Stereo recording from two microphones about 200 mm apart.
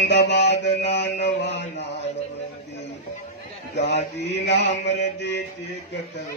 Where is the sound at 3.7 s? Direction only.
60° left (ahead or behind).